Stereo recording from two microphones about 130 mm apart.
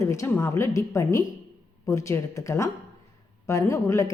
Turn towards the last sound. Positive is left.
turn(degrees=25)  # may be behind; listen again after turning